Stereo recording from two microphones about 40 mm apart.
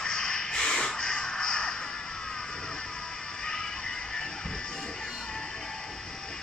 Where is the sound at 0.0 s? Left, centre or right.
Centre.